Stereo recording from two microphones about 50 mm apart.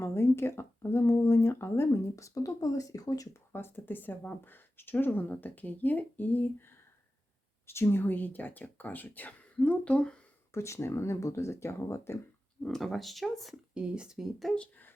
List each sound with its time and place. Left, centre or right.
0.0 s speech: left
3.5 s speech: left
7.7 s speech: left
10.5 s speech: left
12.6 s speech: centre
13.7 s speech: centre
14.2 s speech: centre